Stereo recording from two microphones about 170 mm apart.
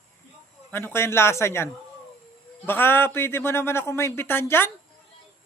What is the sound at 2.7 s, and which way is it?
Speech, 10° left (ahead or behind).